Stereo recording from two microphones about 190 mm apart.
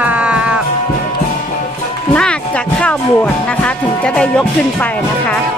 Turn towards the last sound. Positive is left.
turn(degrees=5)  # may be behind; listen again after turning